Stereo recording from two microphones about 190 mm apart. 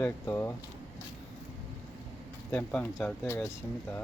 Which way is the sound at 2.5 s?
5° left (ahead or behind).